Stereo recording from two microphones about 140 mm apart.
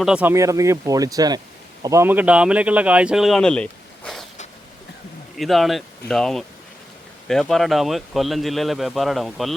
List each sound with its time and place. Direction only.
0.0 s a man's voice: 10° right (ahead or behind)
0.3 s a man's voice: 20° right (ahead or behind); by 4.2 s 5° left (ahead or behind)
5.4 s a man's voice: centre (ahead or behind)